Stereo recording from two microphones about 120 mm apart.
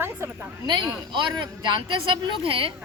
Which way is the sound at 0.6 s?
40° right (ahead or behind).